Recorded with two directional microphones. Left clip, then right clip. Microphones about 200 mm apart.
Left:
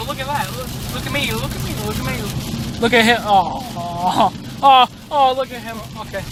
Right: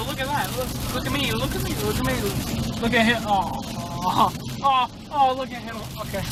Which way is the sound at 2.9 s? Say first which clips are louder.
Left 7 dB; 60° left (ahead or behind).